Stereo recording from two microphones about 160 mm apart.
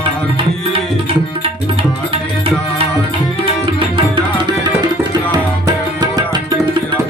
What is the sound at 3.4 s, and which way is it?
Tabla, 35° right (ahead or behind).